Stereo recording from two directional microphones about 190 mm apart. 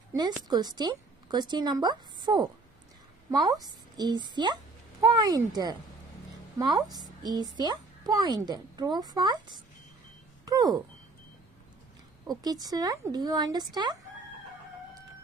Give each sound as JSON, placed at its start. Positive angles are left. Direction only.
{"t": 0.1, "sound": "a woman's voice", "side_deg": -20}
{"t": 6.9, "sound": "a woman's voice", "side_deg": -20}
{"t": 10.4, "sound": "a sound", "side_deg": -20}
{"t": 12.3, "sound": "a woman's voice", "side_deg": -20}